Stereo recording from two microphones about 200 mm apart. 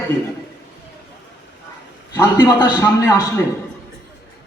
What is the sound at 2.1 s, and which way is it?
A man's voice, 20° left (ahead or behind).